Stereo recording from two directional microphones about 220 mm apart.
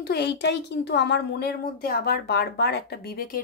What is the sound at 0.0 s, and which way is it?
Speech, 50° left (ahead or behind).